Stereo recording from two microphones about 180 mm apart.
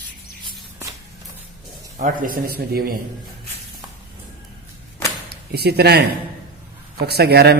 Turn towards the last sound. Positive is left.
turn(degrees=-65)  # may be behind; listen again after turning